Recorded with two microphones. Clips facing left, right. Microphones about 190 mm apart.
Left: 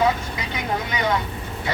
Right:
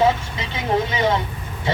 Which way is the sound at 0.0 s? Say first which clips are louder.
Right 3 dB; 25° right (ahead or behind).